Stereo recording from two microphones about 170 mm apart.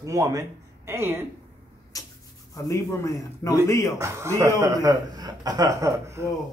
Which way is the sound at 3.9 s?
15° right (ahead or behind).